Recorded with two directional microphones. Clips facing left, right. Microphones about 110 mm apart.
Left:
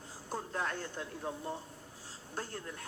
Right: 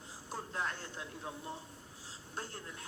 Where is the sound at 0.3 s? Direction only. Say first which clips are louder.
Left 3 dB; 45° left (ahead or behind).